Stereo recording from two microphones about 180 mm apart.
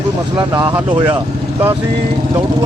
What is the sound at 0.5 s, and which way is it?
Speech, 25° right (ahead or behind).